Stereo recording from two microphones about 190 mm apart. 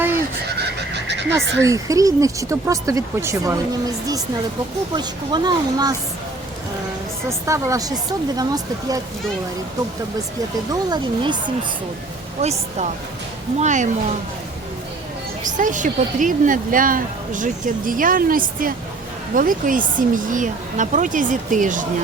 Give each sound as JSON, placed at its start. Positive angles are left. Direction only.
{"t": 0.9, "sound": "frog", "side_deg": -65}
{"t": 1.6, "sound": "speech", "side_deg": -15}
{"t": 4.9, "sound": "speech", "side_deg": -20}
{"t": 7.3, "sound": "speech", "side_deg": -15}
{"t": 10.7, "sound": "speech", "side_deg": -20}
{"t": 12.4, "sound": "a woman's voice", "side_deg": -35}
{"t": 15.5, "sound": "speech", "side_deg": -40}